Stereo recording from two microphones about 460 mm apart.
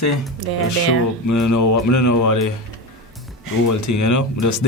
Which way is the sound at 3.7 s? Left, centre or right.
Left.